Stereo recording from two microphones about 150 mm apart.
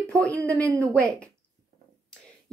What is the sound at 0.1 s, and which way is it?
Speech, 20° right (ahead or behind).